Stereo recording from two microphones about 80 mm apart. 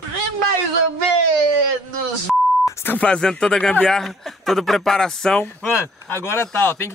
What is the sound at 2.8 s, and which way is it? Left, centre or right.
Speech, centre.